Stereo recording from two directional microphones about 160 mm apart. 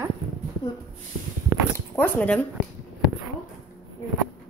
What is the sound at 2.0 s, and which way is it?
Speech, 10° left (ahead or behind).